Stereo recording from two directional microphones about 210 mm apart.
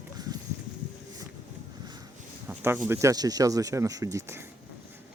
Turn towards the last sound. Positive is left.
turn(degrees=-10)  # may be behind; listen again after turning